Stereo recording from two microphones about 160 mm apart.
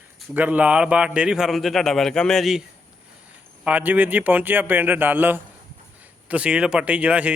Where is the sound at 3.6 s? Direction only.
10° right (ahead or behind).